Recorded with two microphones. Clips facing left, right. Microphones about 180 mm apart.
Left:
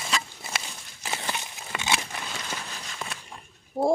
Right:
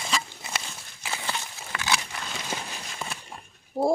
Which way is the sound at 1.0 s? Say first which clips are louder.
Left 1 dB; 15° left (ahead or behind).